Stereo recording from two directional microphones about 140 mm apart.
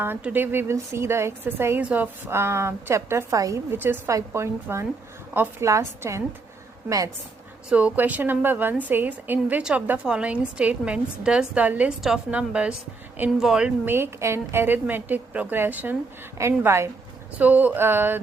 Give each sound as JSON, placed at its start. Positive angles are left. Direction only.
{"t": 0.0, "sound": "a woman's voice", "side_deg": -10}
{"t": 7.7, "sound": "a woman's voice", "side_deg": -10}